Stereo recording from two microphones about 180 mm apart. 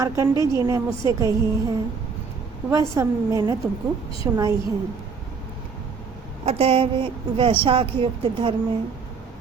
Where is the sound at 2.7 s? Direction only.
15° right (ahead or behind).